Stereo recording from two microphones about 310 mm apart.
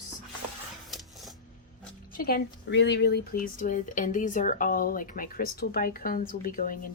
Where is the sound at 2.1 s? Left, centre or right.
Left.